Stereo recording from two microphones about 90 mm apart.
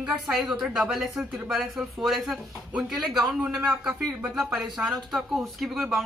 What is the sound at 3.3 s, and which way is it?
Speech, 15° right (ahead or behind).